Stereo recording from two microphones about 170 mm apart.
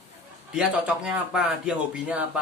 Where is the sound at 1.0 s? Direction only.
5° right (ahead or behind).